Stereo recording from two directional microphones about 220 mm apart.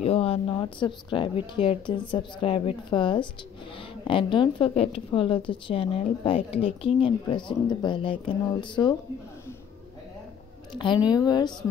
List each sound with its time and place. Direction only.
0.0 s speech: 25° left (ahead or behind)
11.1 s speech: 20° left (ahead or behind)